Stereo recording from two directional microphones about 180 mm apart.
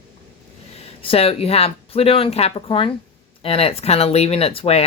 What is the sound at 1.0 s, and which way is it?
Speech, 30° left (ahead or behind).